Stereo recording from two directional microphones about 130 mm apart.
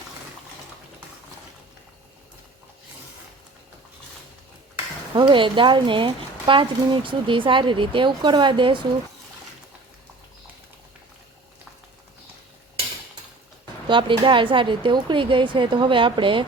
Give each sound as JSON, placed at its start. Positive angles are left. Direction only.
{"t": 5.1, "sound": "speech", "side_deg": -40}
{"t": 13.8, "sound": "speech", "side_deg": -40}